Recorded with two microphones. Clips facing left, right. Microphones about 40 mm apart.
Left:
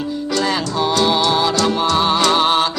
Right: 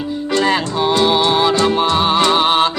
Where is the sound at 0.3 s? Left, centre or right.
Right.